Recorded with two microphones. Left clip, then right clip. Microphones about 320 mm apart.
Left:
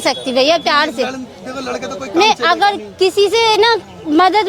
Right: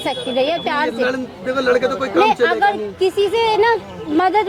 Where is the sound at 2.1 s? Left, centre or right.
Left.